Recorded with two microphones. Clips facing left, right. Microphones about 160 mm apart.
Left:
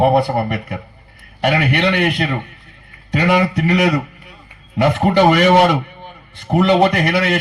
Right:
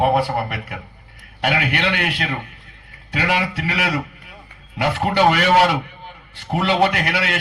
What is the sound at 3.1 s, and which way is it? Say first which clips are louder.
A man's voice: left 6 dB; 45° left (ahead or behind).